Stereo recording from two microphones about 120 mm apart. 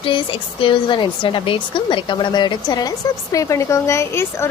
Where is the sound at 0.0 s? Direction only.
45° left (ahead or behind).